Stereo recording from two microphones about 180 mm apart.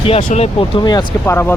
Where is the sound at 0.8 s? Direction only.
25° left (ahead or behind).